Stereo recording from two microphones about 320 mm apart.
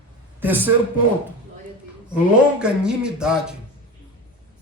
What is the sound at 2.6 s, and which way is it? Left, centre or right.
Speech, centre.